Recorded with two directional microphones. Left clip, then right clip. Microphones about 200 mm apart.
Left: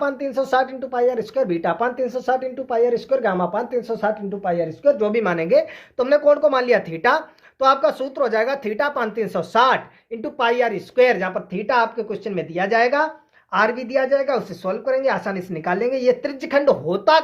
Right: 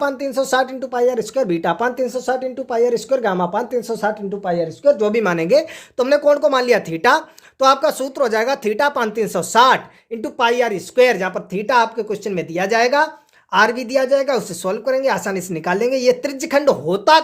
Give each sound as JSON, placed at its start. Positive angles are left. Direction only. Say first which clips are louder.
{"t": 0.0, "sound": "speech", "louder": "right 2 dB", "side_deg": -35}
{"t": 5.2, "sound": "speech", "louder": "right 2 dB", "side_deg": -50}